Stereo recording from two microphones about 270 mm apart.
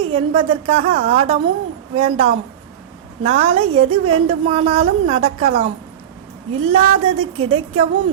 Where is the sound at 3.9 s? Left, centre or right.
Right.